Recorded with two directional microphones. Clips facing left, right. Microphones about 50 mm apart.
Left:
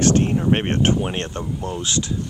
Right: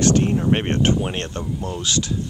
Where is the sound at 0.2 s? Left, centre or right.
Centre.